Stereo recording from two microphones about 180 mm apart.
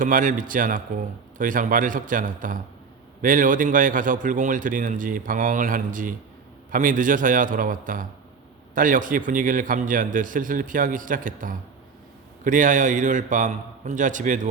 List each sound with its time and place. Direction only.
0.0 s a man's voice: 50° right (ahead or behind)